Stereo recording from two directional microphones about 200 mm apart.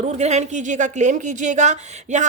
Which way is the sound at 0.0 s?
35° right (ahead or behind).